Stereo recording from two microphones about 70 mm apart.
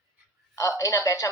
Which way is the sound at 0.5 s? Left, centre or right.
Left.